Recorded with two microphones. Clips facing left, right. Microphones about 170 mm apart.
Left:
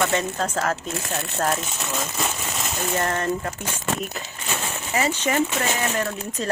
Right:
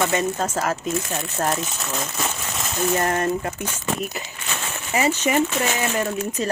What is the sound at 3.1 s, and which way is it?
Speech, 15° right (ahead or behind).